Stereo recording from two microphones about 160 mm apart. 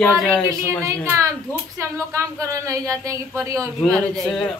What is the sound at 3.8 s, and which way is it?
Speech, 5° left (ahead or behind).